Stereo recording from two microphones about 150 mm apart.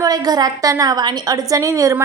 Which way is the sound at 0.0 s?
25° right (ahead or behind).